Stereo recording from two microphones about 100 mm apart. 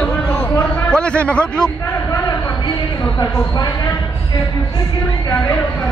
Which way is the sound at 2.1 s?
40° left (ahead or behind).